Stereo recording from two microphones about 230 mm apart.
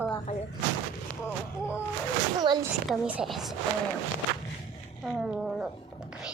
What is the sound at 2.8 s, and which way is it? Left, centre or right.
Speech, centre.